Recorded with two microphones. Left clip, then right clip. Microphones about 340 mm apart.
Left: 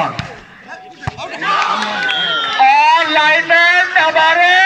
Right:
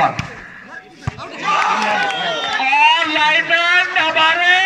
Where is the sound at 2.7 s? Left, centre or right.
Centre.